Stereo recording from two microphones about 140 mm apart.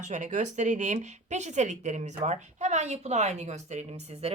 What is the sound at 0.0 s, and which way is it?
Speech, 60° right (ahead or behind).